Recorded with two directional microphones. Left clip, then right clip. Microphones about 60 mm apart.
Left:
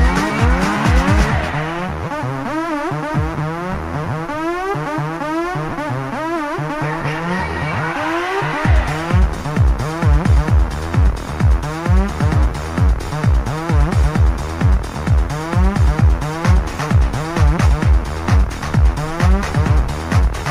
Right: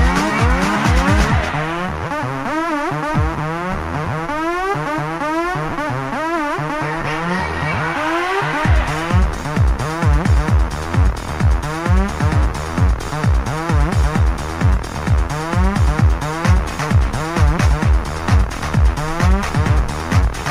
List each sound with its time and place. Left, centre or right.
0.0 s vehicle: left
2.5 s music: left
4.4 s music: left